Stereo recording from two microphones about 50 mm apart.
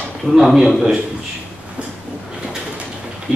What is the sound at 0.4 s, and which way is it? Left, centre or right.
Speech, centre.